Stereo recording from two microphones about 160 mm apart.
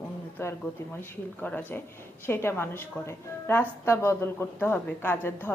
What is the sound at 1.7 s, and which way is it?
A woman's voice, 10° left (ahead or behind).